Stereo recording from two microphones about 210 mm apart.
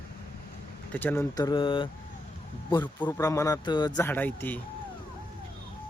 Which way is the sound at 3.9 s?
10° left (ahead or behind).